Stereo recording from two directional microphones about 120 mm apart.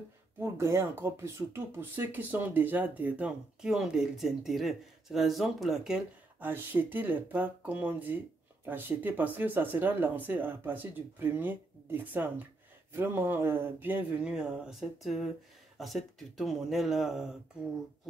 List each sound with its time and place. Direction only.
0.4 s speech: 20° right (ahead or behind); by 6.0 s 5° right (ahead or behind)
6.4 s speech: 15° right (ahead or behind)